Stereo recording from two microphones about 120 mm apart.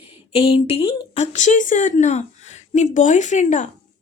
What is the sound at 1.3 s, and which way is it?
A woman's voice, 90° left.